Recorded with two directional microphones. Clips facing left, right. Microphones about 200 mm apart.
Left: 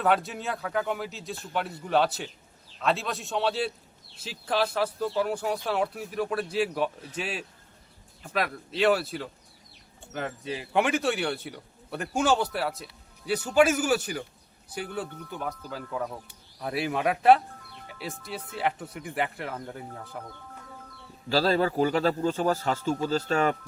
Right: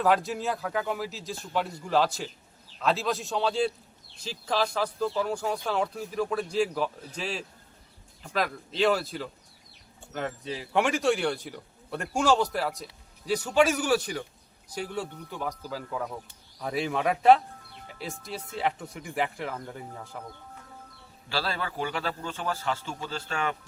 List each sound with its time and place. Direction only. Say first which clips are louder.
0.0 s speech: right 1 dB; centre (ahead or behind)
21.2 s a man's voice: left 9 dB; 40° left (ahead or behind)